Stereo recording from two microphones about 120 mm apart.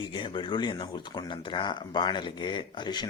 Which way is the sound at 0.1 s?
40° left (ahead or behind).